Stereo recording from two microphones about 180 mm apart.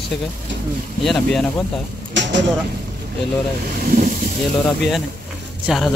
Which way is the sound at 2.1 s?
85° right.